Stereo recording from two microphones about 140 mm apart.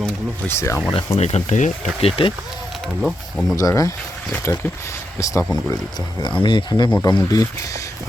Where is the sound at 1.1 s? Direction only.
50° left (ahead or behind).